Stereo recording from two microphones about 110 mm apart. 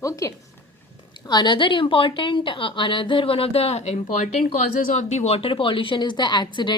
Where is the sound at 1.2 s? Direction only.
40° left (ahead or behind).